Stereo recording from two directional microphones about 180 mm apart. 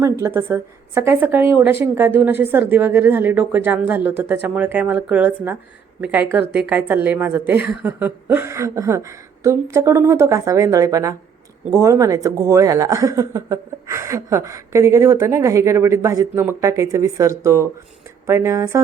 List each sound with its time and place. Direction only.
0.0 s speech: 15° right (ahead or behind)